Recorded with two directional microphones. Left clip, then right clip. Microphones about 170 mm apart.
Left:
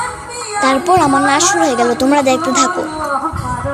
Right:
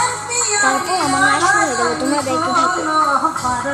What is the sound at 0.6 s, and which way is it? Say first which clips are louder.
Speech: left 7 dB; 45° left (ahead or behind).